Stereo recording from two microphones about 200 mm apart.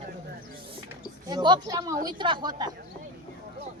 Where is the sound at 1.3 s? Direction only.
20° right (ahead or behind).